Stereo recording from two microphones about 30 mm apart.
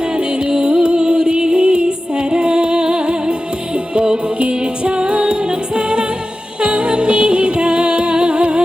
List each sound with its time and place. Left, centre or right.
0.6 s music: right
4.4 s music: right